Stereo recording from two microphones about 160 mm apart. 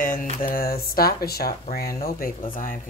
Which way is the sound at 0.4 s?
65° left (ahead or behind).